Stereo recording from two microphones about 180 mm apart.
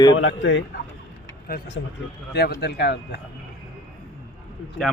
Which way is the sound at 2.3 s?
65° left (ahead or behind).